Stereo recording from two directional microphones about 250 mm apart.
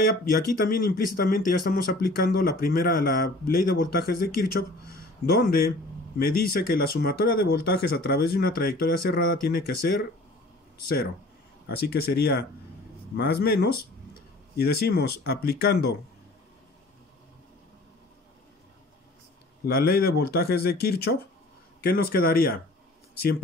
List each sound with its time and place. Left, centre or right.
0.0 s speech: left
5.3 s speech: left
11.9 s speech: left
19.6 s speech: left